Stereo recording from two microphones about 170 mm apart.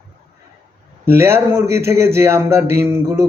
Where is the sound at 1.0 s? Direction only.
15° right (ahead or behind).